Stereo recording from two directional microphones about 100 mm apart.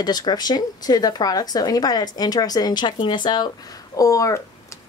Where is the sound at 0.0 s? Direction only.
45° left (ahead or behind).